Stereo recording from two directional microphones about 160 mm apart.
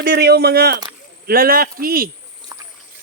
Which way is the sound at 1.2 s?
70° right (ahead or behind).